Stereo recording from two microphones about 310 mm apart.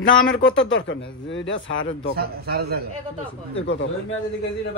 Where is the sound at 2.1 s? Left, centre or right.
Right.